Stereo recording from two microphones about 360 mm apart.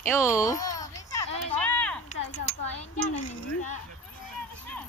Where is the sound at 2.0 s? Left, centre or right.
Centre.